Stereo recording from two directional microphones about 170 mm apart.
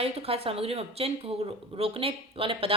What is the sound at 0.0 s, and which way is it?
A woman's voice, 35° right (ahead or behind).